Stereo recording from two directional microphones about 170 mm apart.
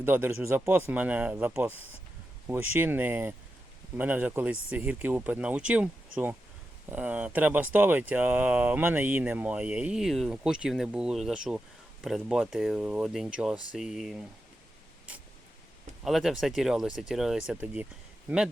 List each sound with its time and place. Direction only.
0.0 s speech: 10° right (ahead or behind)
16.0 s speech: centre (ahead or behind)